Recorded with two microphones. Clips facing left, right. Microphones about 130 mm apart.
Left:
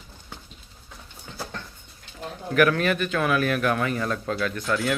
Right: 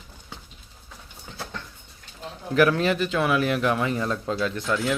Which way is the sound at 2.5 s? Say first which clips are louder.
Right 1 dB; 25° right (ahead or behind).